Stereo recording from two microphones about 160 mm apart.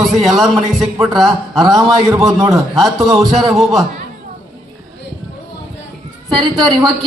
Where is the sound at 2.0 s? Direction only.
20° right (ahead or behind).